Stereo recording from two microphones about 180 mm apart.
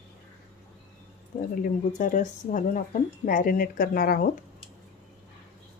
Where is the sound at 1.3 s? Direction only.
45° left (ahead or behind).